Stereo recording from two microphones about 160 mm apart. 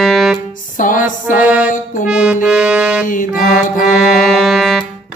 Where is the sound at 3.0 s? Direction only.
55° left (ahead or behind).